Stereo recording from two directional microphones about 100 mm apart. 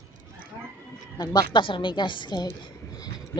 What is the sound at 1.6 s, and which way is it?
Speech, 55° left (ahead or behind).